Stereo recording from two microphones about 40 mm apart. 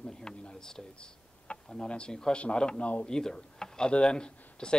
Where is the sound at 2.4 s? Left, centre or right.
Left.